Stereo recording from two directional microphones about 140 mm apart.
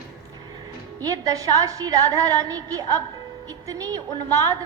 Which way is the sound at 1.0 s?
25° right (ahead or behind).